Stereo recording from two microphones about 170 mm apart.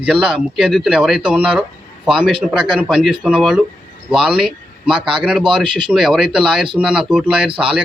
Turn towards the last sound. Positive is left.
turn(degrees=-5)  # may be behind; listen again after turning